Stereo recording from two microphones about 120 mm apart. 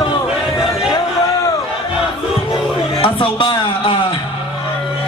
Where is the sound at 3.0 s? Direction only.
45° left (ahead or behind).